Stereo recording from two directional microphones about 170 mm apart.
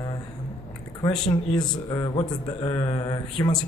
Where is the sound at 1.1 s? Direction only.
5° left (ahead or behind).